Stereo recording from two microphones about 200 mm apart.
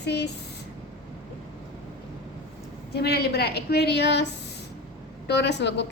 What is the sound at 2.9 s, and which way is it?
A woman's voice, 55° left (ahead or behind).